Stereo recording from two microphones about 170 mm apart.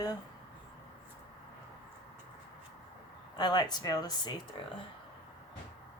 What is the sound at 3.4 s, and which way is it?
Speech, 25° left (ahead or behind).